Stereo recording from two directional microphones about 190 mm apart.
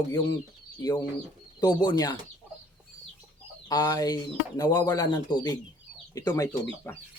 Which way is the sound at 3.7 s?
20° left (ahead or behind).